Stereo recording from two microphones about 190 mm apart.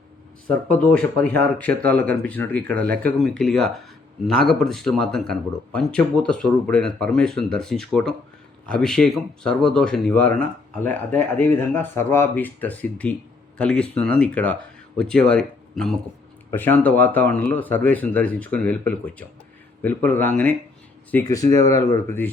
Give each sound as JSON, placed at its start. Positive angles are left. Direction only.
{"t": 0.7, "sound": "speech", "side_deg": 5}